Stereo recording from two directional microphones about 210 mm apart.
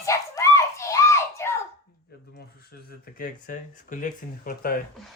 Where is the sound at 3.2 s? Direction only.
40° left (ahead or behind).